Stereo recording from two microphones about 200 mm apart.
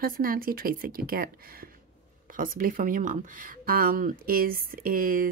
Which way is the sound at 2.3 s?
45° right (ahead or behind).